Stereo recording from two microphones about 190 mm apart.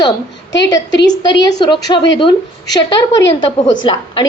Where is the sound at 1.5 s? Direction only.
25° left (ahead or behind).